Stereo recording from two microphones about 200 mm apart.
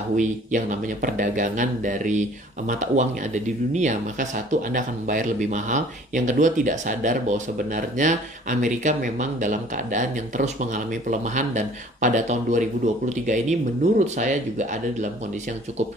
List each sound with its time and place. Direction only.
0.1 s speech: 40° right (ahead or behind)